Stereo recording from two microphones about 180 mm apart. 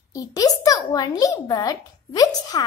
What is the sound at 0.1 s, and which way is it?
A child's voice, 20° left (ahead or behind).